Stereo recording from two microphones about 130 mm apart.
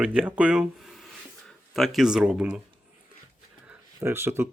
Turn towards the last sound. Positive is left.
turn(degrees=-20)  # may be behind; listen again after turning